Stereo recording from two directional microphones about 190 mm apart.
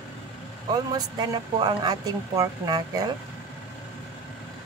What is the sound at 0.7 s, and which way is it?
Speech, 20° right (ahead or behind).